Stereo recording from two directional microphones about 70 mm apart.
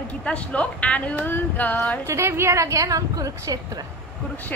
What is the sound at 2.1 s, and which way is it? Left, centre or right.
A woman's voice, right.